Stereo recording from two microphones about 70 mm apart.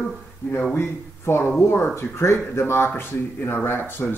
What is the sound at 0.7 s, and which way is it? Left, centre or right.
Speech, left.